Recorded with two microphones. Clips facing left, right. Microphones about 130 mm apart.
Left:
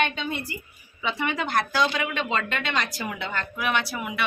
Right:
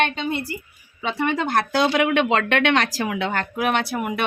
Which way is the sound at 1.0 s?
45° right (ahead or behind).